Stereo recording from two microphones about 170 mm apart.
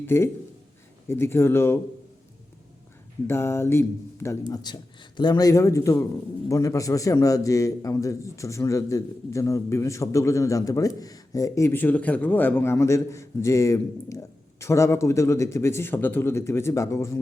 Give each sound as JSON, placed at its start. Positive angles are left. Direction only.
{"t": 0.0, "sound": "a man's voice", "side_deg": 15}
{"t": 3.2, "sound": "a man's voice", "side_deg": 15}